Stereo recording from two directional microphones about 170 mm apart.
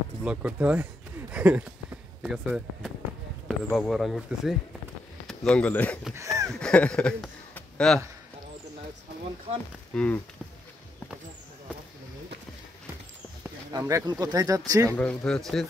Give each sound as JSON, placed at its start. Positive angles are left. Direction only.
{"t": 0.2, "sound": "speech", "side_deg": -5}
{"t": 6.1, "sound": "a sound", "side_deg": -20}
{"t": 6.6, "sound": "speech", "side_deg": 5}
{"t": 9.9, "sound": "speech", "side_deg": 5}
{"t": 13.7, "sound": "speech", "side_deg": -20}
{"t": 14.9, "sound": "speech", "side_deg": 10}